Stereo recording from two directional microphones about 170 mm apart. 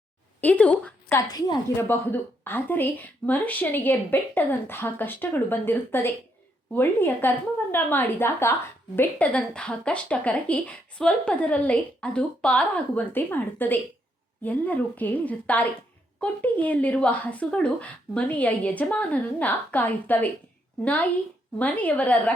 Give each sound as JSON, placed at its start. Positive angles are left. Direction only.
{"t": 0.4, "sound": "a woman's voice", "side_deg": 10}
{"t": 1.3, "sound": "a woman's voice", "side_deg": 20}
{"t": 2.0, "sound": "speech", "side_deg": 10}